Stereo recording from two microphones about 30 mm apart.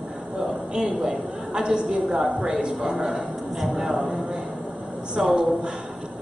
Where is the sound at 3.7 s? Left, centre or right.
Centre.